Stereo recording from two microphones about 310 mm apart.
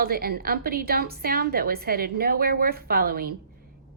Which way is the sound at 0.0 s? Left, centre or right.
Right.